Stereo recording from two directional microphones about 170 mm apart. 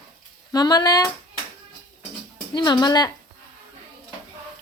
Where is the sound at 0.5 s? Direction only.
25° left (ahead or behind).